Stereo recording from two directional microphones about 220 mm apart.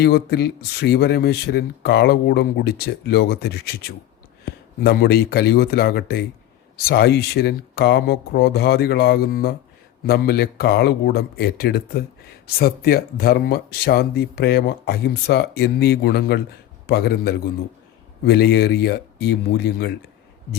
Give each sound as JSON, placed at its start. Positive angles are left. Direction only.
{"t": 0.0, "sound": "speech", "side_deg": 45}